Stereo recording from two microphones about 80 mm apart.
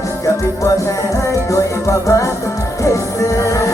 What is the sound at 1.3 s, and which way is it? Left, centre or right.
Music, left.